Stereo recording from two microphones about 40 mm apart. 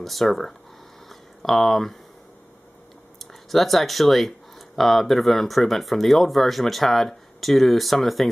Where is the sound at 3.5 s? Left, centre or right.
Centre.